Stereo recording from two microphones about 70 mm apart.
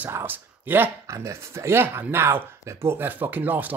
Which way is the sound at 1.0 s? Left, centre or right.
Right.